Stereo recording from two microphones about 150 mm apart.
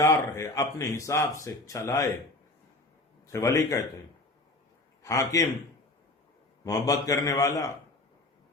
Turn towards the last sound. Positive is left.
turn(degrees=20)  # may be behind; listen again after turning